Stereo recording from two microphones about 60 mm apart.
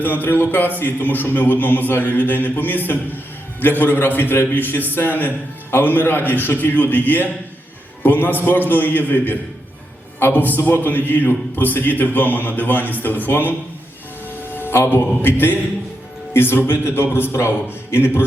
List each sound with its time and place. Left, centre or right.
0.0 s music: left
14.9 s music: left